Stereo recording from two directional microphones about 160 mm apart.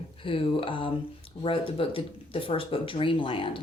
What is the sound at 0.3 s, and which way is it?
Speech, 35° left (ahead or behind).